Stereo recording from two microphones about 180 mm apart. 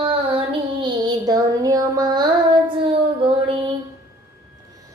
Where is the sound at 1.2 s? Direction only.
20° right (ahead or behind).